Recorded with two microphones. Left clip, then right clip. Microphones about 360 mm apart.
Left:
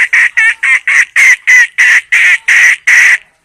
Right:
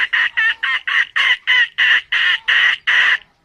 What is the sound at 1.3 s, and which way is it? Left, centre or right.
Duck, left.